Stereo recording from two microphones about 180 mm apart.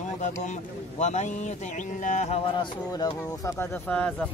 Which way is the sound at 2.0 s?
40° left (ahead or behind).